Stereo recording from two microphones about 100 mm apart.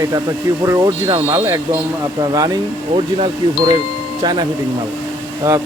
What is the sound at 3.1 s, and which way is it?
Speech, 60° right (ahead or behind).